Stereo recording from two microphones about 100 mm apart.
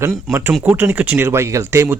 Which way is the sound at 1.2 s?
25° right (ahead or behind).